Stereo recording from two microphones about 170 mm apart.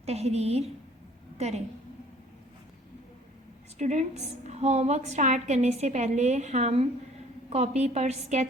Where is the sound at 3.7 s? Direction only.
45° right (ahead or behind).